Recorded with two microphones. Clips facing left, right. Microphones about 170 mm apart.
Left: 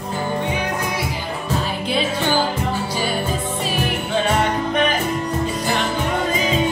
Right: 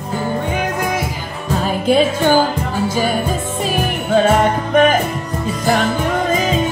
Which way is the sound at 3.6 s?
45° right (ahead or behind).